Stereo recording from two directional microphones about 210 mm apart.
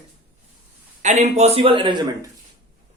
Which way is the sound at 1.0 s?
30° right (ahead or behind).